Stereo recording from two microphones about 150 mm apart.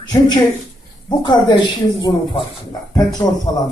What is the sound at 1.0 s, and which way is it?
Speech, 30° left (ahead or behind).